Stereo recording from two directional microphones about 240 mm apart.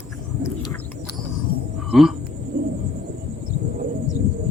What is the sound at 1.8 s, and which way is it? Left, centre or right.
Speech, centre.